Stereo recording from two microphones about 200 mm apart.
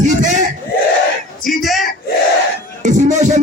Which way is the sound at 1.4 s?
Centre (ahead or behind).